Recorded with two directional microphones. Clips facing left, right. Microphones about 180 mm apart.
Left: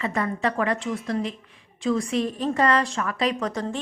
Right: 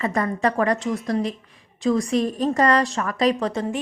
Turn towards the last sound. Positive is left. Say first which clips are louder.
# right 3 dB
turn(degrees=-20)  # may be behind; listen again after turning